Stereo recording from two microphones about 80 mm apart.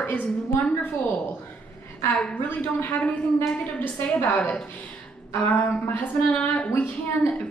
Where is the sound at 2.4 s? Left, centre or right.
Left.